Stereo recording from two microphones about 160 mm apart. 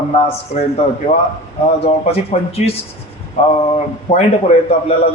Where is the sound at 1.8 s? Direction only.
40° left (ahead or behind).